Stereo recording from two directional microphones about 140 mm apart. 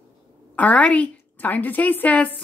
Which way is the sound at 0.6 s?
10° left (ahead or behind).